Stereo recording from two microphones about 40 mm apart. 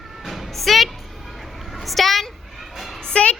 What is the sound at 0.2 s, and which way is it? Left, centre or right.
Music, centre.